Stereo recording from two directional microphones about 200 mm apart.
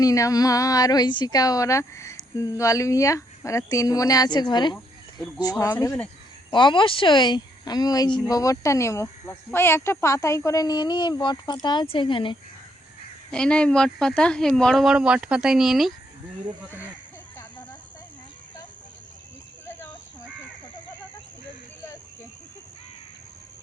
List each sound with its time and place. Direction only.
0.0 s a woman's voice: 15° left (ahead or behind)
6.5 s a woman's voice: 25° left (ahead or behind)
13.3 s speech: 5° left (ahead or behind)